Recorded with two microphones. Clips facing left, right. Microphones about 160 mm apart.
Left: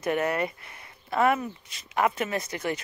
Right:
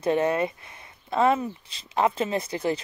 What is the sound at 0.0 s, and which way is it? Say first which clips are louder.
Speech: right 3 dB; 25° right (ahead or behind).